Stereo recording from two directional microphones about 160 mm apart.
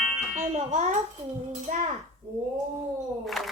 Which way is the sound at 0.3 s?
45° right (ahead or behind).